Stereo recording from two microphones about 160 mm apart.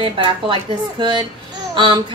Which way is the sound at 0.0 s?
30° right (ahead or behind).